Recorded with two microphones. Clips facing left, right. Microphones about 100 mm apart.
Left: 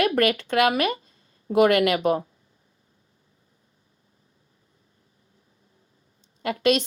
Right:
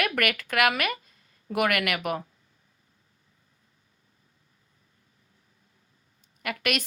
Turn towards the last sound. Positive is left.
turn(degrees=25)  # may be behind; listen again after turning